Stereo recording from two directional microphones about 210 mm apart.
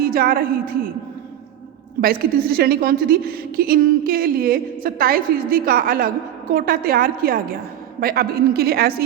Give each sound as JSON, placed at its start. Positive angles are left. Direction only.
{"t": 0.0, "sound": "a woman's voice", "side_deg": -45}
{"t": 2.0, "sound": "a woman's voice", "side_deg": -45}